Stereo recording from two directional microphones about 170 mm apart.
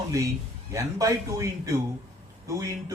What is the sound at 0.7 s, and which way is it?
Speech, 20° right (ahead or behind).